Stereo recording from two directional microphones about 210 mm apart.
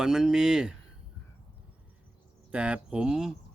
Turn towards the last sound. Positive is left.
turn(degrees=-5)  # may be behind; listen again after turning